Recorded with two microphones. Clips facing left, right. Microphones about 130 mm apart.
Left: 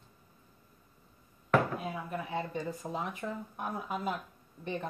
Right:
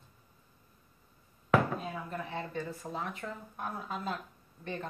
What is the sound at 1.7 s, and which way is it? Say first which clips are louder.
Speech: left 1 dB; 10° left (ahead or behind).